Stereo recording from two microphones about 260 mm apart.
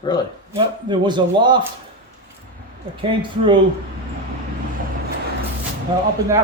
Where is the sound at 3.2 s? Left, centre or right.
Centre.